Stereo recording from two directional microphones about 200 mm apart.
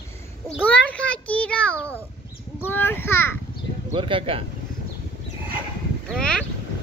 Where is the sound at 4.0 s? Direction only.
25° right (ahead or behind).